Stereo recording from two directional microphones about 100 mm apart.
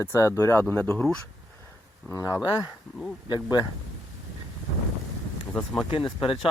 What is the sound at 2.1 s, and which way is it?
Speech, 35° left (ahead or behind).